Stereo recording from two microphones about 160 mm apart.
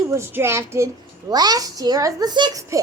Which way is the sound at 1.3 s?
25° right (ahead or behind).